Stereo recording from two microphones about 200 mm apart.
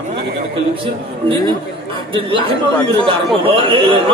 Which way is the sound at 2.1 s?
25° right (ahead or behind).